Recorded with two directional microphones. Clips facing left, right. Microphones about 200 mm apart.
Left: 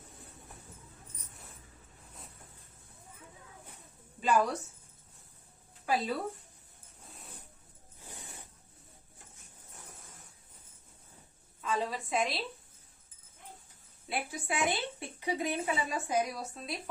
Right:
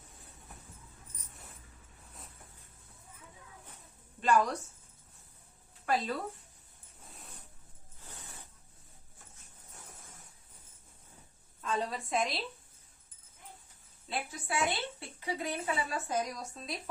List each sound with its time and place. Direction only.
4.2 s a woman's voice: 5° left (ahead or behind)
5.8 s speech: 5° left (ahead or behind)
8.0 s a sound: 15° left (ahead or behind)
11.6 s a woman's voice: centre (ahead or behind)
14.1 s a woman's voice: 15° left (ahead or behind)